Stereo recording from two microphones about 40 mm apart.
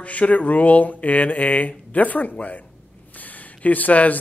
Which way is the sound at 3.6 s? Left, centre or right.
Left.